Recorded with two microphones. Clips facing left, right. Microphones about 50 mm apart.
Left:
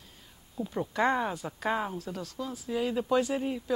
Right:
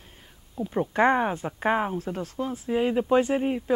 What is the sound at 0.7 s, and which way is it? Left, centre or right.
Speech, right.